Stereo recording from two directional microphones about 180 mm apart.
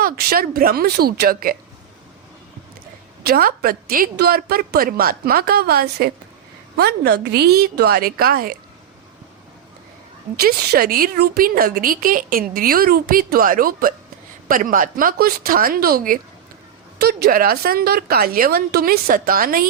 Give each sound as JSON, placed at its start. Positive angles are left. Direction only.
{"t": 0.0, "sound": "a woman's voice", "side_deg": -55}
{"t": 3.2, "sound": "a woman's voice", "side_deg": -55}
{"t": 10.3, "sound": "a woman's voice", "side_deg": -60}